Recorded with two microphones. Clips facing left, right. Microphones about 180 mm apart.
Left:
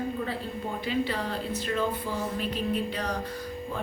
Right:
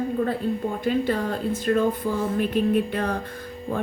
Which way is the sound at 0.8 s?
50° right (ahead or behind).